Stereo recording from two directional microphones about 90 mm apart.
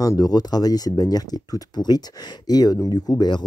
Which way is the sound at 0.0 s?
40° left (ahead or behind).